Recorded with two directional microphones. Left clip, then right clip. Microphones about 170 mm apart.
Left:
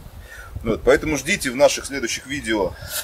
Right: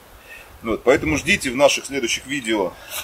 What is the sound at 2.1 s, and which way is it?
Speech, 50° left (ahead or behind).